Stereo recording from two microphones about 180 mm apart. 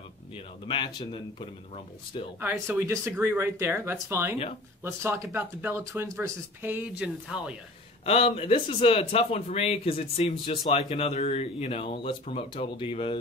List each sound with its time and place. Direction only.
0.7 s speech: 25° left (ahead or behind)
2.4 s speech: 15° right (ahead or behind)
8.0 s speech: 35° left (ahead or behind)